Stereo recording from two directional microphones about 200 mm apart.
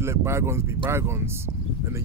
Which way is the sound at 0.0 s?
15° right (ahead or behind).